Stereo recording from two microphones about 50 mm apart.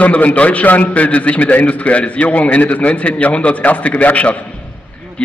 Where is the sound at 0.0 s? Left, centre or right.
Left.